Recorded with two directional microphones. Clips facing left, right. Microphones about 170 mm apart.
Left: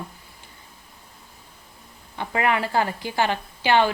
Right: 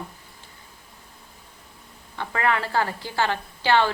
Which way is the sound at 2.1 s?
15° left (ahead or behind).